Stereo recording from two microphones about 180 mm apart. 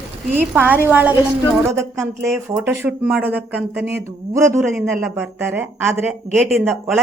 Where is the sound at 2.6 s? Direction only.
5° right (ahead or behind).